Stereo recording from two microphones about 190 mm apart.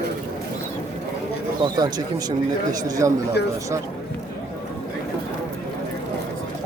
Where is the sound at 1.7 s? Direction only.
20° right (ahead or behind).